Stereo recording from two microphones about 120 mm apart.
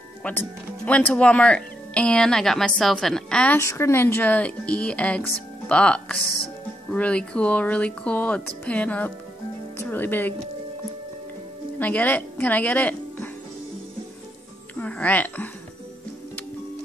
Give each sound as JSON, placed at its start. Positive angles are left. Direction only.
{"t": 0.2, "sound": "speech", "side_deg": 15}
{"t": 3.5, "sound": "speech", "side_deg": 20}
{"t": 11.8, "sound": "a woman's voice", "side_deg": 15}
{"t": 14.8, "sound": "speech", "side_deg": 10}